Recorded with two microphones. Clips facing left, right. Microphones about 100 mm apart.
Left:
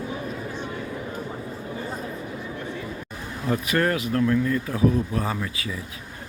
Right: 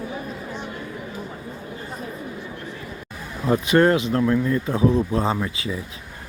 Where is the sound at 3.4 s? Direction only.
25° right (ahead or behind).